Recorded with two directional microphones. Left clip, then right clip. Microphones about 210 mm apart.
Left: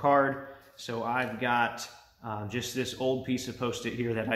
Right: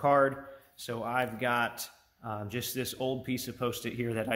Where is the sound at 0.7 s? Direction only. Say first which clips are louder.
Left 1 dB; 50° right (ahead or behind).